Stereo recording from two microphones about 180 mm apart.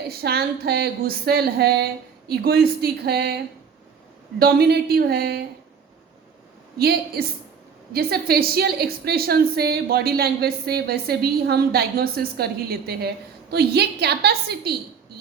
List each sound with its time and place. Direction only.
0.1 s a woman's voice: 60° right (ahead or behind)
6.7 s a woman's voice: 60° right (ahead or behind)